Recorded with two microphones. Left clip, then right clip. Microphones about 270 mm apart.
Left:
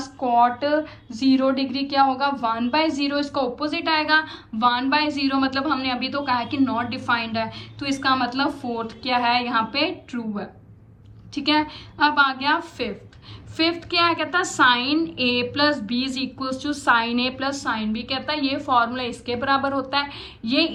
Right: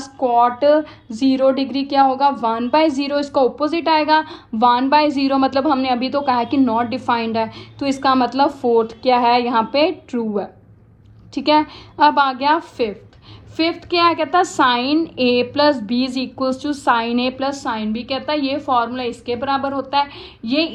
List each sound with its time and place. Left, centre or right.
0.0 s a woman's voice: right